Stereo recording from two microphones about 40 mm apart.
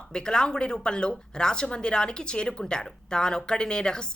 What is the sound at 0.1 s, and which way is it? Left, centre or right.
A woman's voice, centre.